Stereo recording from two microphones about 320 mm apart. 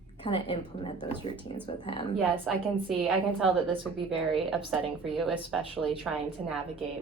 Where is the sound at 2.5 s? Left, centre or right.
Centre.